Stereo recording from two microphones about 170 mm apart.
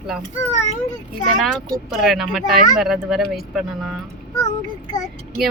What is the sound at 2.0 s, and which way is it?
Speech, centre (ahead or behind).